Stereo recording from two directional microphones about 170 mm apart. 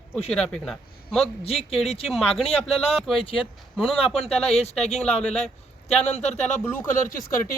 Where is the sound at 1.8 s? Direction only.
35° left (ahead or behind).